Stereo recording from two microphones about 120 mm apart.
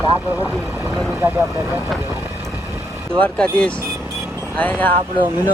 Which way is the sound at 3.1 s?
10° left (ahead or behind).